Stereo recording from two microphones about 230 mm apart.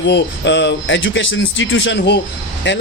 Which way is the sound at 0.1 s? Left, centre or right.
Left.